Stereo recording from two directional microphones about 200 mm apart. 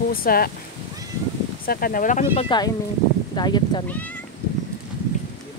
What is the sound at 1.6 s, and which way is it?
Speech, 45° left (ahead or behind).